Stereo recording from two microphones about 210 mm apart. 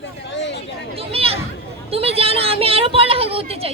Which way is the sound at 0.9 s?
25° right (ahead or behind).